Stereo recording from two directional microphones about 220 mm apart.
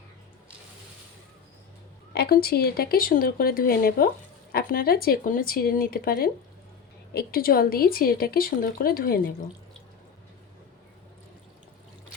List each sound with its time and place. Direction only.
2.1 s speech: 45° left (ahead or behind)